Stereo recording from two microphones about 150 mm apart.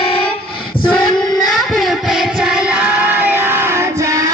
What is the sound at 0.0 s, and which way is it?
Child singing, 35° left (ahead or behind).